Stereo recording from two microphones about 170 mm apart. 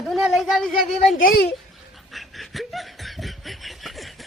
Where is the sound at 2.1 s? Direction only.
Centre (ahead or behind).